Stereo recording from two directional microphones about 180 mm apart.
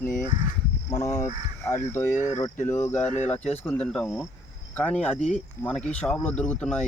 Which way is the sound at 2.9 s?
40° left (ahead or behind).